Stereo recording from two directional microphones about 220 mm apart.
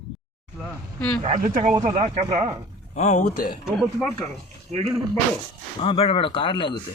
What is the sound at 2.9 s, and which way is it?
Speech, 30° left (ahead or behind).